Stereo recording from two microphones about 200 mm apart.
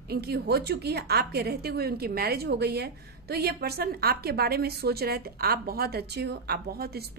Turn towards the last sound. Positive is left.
turn(degrees=-50)  # may be behind; listen again after turning